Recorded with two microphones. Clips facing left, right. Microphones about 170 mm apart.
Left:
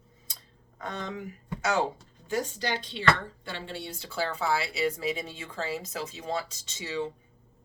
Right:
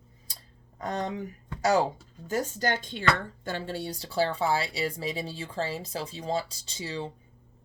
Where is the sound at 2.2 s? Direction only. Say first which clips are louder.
Right 2 dB; 45° right (ahead or behind).